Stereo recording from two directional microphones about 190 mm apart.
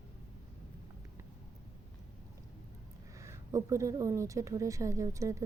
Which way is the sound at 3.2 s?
15° right (ahead or behind).